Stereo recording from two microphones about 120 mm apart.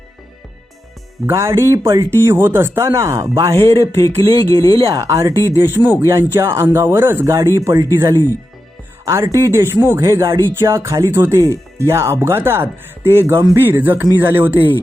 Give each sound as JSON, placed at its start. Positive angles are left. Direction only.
{"t": 1.3, "sound": "speech", "side_deg": -25}
{"t": 4.3, "sound": "speech", "side_deg": 30}
{"t": 4.7, "sound": "speech", "side_deg": -50}
{"t": 4.9, "sound": "speech", "side_deg": -25}